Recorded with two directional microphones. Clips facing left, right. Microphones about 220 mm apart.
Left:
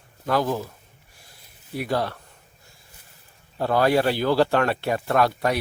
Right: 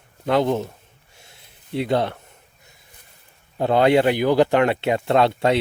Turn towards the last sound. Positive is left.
turn(degrees=-25)  # may be behind; listen again after turning